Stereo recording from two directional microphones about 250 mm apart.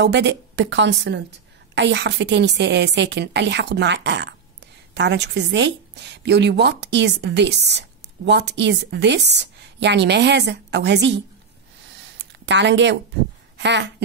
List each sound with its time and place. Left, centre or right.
0.0 s a woman's voice: right
12.0 s a sound: right
13.6 s speech: right